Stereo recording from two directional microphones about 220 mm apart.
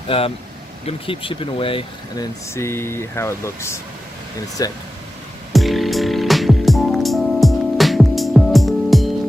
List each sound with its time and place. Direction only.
0.1 s speech: 25° left (ahead or behind)
5.5 s music: centre (ahead or behind)